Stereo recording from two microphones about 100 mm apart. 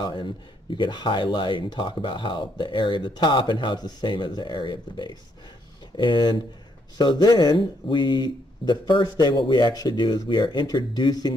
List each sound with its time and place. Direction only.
0.0 s speech: 50° left (ahead or behind)